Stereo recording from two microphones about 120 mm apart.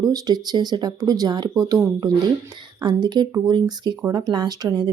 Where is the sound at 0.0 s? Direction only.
30° right (ahead or behind).